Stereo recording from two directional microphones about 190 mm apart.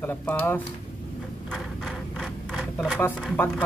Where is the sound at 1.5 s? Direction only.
Centre (ahead or behind).